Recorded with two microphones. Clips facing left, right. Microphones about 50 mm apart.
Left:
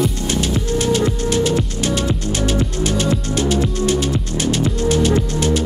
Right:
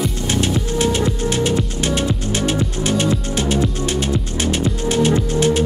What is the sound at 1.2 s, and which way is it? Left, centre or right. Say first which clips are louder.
Music: left 1 dB; right.